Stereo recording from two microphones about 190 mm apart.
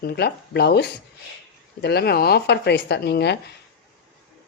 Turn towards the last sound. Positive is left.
turn(degrees=60)  # may be behind; listen again after turning